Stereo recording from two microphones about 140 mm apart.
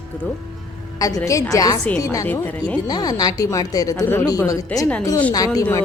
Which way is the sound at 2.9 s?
30° left (ahead or behind).